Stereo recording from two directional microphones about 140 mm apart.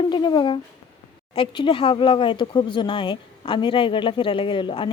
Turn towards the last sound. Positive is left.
turn(degrees=35)  # may be behind; listen again after turning